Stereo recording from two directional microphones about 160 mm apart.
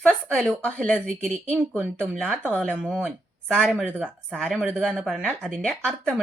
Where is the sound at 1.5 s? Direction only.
5° right (ahead or behind).